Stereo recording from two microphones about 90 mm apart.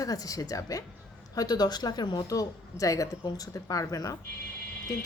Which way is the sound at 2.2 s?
40° left (ahead or behind).